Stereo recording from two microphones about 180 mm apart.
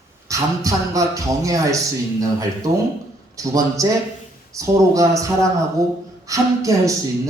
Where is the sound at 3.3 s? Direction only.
20° right (ahead or behind).